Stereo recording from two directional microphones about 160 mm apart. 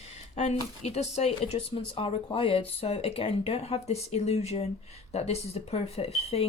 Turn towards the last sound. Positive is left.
turn(degrees=40)  # may be behind; listen again after turning